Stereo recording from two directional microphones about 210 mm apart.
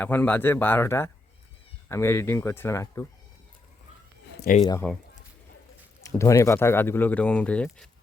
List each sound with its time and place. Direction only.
0.0 s speech: 10° left (ahead or behind)
4.4 s a sound: 40° left (ahead or behind)
4.6 s speech: 15° left (ahead or behind)
6.0 s speech: 15° left (ahead or behind)